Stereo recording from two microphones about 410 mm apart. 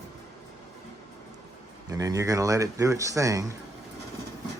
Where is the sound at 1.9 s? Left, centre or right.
Centre.